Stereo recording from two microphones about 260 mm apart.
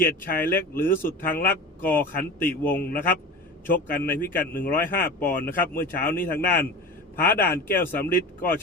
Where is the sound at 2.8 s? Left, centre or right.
Left.